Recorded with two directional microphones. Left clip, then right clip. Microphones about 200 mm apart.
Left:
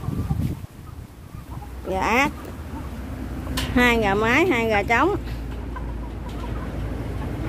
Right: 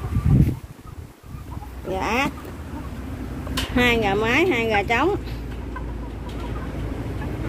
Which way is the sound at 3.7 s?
15° left (ahead or behind).